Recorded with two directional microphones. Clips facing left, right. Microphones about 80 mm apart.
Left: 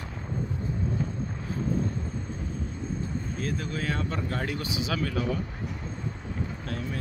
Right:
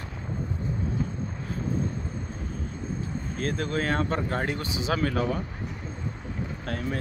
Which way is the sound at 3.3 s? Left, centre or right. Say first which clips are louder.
Right 6 dB; right.